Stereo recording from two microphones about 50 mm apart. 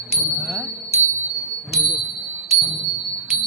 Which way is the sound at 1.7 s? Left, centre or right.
Centre.